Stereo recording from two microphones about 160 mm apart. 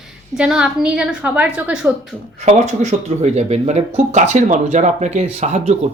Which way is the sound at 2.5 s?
45° right (ahead or behind).